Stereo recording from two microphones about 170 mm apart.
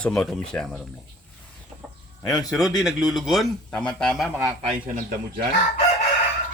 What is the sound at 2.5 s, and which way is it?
Speech, centre (ahead or behind).